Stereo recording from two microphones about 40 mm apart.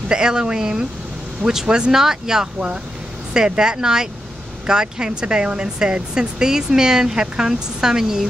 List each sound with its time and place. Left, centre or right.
0.1 s speech: centre
2.4 s speech: right